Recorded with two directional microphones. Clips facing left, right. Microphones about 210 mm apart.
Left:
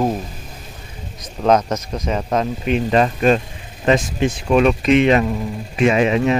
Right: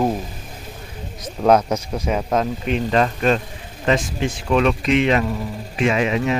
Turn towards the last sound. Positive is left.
turn(degrees=25)  # may be behind; listen again after turning